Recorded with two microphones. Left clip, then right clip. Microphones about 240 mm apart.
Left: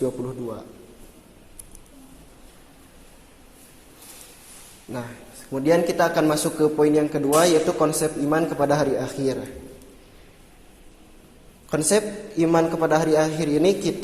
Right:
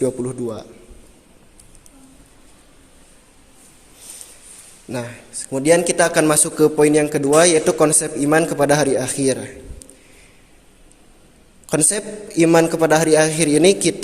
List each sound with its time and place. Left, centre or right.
4.9 s a man's voice: right
11.7 s a man's voice: right